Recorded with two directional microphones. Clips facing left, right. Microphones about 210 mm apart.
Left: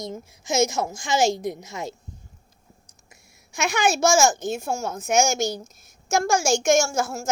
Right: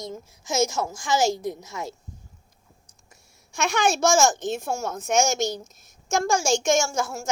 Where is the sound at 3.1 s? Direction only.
10° left (ahead or behind).